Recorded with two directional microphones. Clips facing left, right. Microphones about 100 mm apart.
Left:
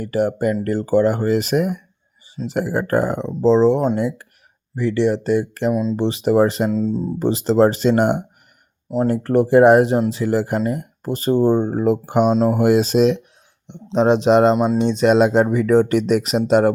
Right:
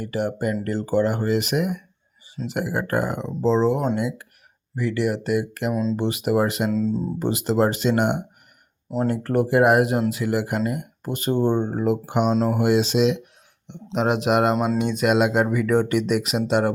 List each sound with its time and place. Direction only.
0.0 s speech: 40° left (ahead or behind)
5.7 s speech: 15° left (ahead or behind)
6.0 s speech: 30° left (ahead or behind)
13.7 s a man's voice: 25° left (ahead or behind)